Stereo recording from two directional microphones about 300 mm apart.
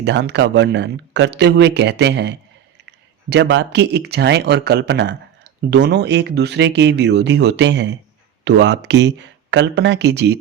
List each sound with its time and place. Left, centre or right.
0.0 s speech: right